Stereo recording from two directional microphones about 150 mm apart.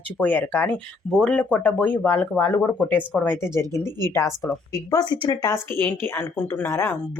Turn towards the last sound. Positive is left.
turn(degrees=15)  # may be behind; listen again after turning